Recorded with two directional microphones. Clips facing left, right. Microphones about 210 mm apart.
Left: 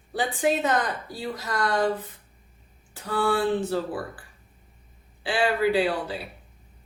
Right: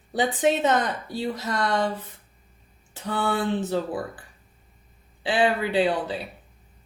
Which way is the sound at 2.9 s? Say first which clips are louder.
Left 2 dB; 20° right (ahead or behind).